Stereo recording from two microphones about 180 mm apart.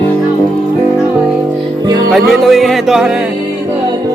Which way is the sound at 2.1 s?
Centre (ahead or behind).